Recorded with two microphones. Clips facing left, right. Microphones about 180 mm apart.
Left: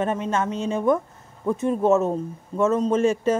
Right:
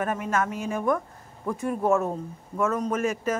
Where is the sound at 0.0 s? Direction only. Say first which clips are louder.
Left 3 dB; 25° left (ahead or behind).